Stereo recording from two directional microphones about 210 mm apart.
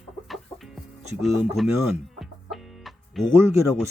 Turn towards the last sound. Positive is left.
turn(degrees=-15)  # may be behind; listen again after turning